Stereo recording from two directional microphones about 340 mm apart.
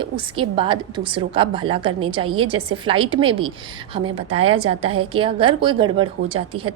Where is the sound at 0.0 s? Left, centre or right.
Centre.